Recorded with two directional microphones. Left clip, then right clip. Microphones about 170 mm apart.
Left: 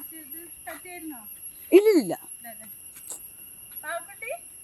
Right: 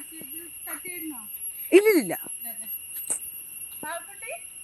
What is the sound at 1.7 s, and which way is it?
Speech, 15° left (ahead or behind).